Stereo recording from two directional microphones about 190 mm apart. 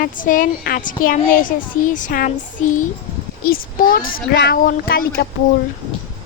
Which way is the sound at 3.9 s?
50° left (ahead or behind).